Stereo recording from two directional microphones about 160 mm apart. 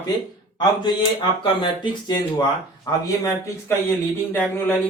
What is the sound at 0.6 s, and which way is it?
Speech, 30° left (ahead or behind).